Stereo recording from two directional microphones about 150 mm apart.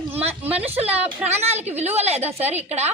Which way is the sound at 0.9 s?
10° right (ahead or behind).